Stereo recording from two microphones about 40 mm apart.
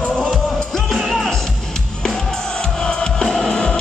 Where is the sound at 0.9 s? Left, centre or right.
Centre.